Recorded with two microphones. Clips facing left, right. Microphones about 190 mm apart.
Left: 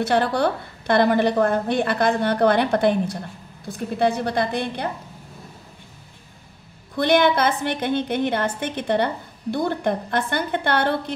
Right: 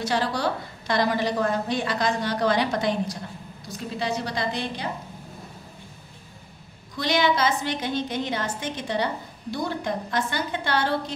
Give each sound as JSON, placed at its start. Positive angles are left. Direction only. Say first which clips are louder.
{"t": 0.0, "sound": "a woman's voice", "louder": "left 5 dB", "side_deg": 60}
{"t": 7.0, "sound": "a woman's voice", "louder": "left 5 dB", "side_deg": 55}